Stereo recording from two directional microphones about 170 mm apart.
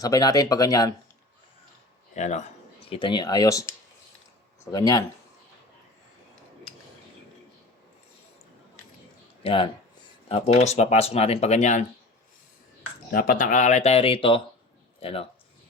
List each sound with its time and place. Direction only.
0.0 s speech: 20° left (ahead or behind)
2.1 s speech: 45° left (ahead or behind)
2.9 s speech: 25° left (ahead or behind)
9.4 s speech: 30° left (ahead or behind)
13.1 s speech: 60° left (ahead or behind); by 15.3 s 35° left (ahead or behind)